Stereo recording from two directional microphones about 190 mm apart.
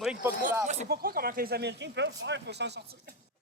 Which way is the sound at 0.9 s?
55° right (ahead or behind).